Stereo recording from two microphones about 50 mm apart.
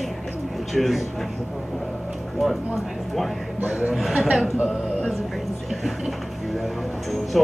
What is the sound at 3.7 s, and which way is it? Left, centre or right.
Speech, right.